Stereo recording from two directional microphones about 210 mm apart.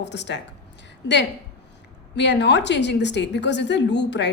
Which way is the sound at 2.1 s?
55° left (ahead or behind).